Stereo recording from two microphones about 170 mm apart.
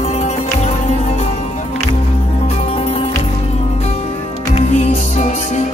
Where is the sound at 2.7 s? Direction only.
35° left (ahead or behind).